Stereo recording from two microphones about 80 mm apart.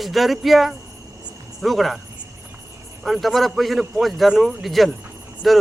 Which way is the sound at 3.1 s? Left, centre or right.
Centre.